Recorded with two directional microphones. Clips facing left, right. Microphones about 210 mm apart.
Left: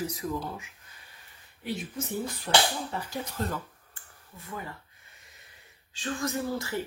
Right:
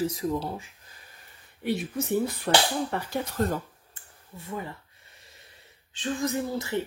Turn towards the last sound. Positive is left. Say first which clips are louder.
# right 2 dB
turn(degrees=-20)  # may be behind; listen again after turning